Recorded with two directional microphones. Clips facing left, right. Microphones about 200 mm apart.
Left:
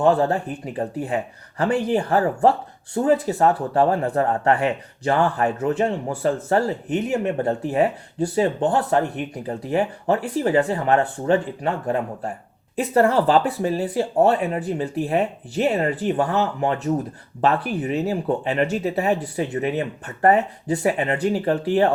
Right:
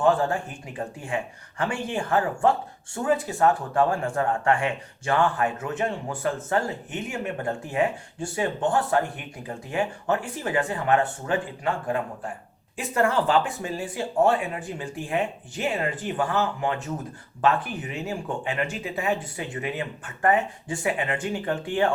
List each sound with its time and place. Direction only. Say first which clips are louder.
0.0 s speech: left 4 dB; 40° left (ahead or behind)